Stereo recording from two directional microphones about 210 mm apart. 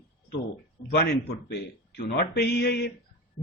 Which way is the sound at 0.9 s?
50° left (ahead or behind).